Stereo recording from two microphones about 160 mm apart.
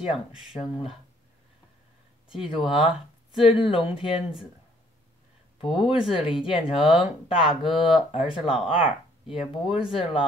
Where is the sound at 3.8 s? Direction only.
35° left (ahead or behind).